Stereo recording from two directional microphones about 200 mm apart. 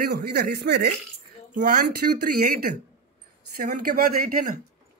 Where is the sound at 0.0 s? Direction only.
55° right (ahead or behind).